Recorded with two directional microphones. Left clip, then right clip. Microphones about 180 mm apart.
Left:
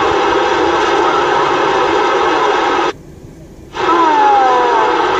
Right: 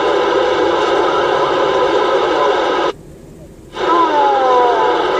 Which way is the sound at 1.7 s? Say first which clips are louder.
Left 1 dB; 10° left (ahead or behind).